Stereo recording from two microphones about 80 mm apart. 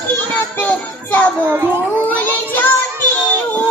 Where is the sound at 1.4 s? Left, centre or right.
Right.